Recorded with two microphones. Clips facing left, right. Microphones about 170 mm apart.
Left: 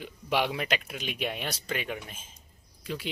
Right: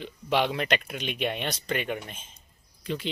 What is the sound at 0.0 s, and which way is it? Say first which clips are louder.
Speech: right 3 dB; 10° left (ahead or behind).